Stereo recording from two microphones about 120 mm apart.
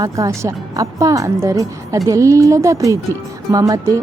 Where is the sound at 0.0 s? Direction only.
25° right (ahead or behind).